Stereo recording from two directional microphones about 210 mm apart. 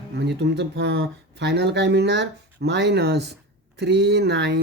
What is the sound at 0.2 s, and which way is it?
Speech, 55° right (ahead or behind).